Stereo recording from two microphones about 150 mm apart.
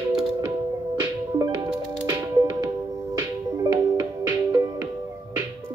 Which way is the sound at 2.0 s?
25° right (ahead or behind).